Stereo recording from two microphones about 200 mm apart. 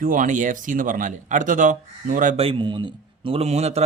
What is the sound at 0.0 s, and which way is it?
Speech, 40° right (ahead or behind).